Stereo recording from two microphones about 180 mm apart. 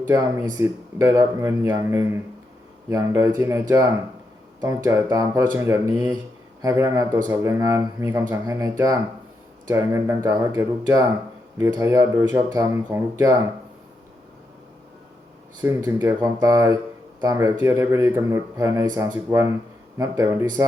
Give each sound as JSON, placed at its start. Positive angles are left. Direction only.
{"t": 0.1, "sound": "speech", "side_deg": -15}
{"t": 15.6, "sound": "speech", "side_deg": -15}